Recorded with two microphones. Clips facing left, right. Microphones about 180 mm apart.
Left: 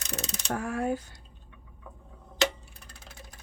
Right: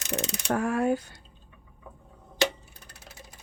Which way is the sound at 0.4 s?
70° right (ahead or behind).